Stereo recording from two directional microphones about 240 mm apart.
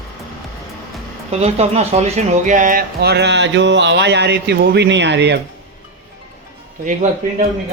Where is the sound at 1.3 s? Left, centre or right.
Right.